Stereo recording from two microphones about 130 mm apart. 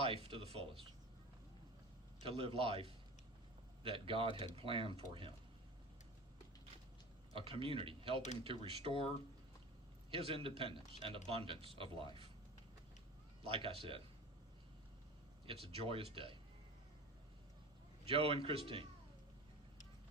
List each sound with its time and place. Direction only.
0.0 s speech: 45° right (ahead or behind)
2.2 s a man's voice: 45° right (ahead or behind)
7.3 s a man's voice: 45° right (ahead or behind)
10.1 s a man's voice: 45° right (ahead or behind)
13.4 s a man's voice: 45° right (ahead or behind)
15.4 s a man's voice: 45° right (ahead or behind)
18.0 s a man's voice: 45° right (ahead or behind)